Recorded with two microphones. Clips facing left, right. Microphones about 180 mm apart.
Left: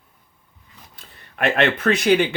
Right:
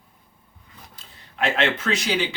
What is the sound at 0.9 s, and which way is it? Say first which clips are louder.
Speech: left 1 dB; 60° left (ahead or behind).